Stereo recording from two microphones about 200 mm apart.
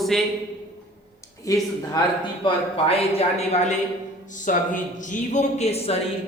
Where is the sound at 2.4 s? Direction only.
30° left (ahead or behind).